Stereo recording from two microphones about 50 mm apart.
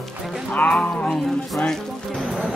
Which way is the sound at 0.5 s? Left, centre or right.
Left.